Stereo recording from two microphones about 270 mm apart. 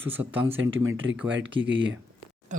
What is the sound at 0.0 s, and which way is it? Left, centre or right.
Speech, centre.